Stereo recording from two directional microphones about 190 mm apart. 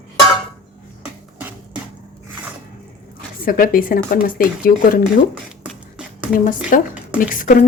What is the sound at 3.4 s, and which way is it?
Speech, 50° left (ahead or behind).